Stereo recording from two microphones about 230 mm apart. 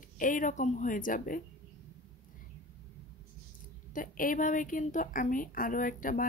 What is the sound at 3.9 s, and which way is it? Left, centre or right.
A woman's voice, left.